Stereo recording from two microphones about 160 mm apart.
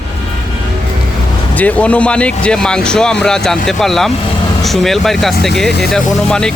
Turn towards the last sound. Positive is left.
turn(degrees=5)  # may be behind; listen again after turning